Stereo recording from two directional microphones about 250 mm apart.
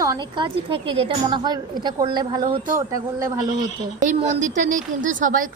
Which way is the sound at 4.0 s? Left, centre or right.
Right.